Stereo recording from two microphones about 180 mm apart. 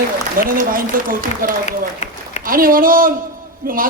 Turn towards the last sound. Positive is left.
turn(degrees=-50)  # may be behind; listen again after turning